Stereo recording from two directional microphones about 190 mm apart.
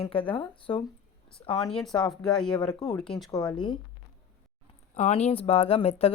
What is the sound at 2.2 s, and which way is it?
Speech, 5° left (ahead or behind).